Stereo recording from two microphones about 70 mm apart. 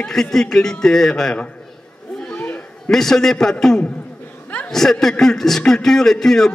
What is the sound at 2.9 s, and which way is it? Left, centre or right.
A man's voice, centre.